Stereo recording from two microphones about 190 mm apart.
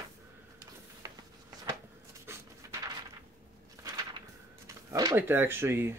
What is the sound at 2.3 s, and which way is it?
Pant, 15° right (ahead or behind).